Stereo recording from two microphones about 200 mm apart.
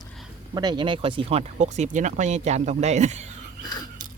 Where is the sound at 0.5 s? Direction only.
20° right (ahead or behind).